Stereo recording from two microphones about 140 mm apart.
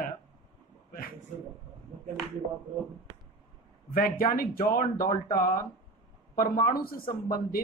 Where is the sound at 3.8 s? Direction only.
90° left.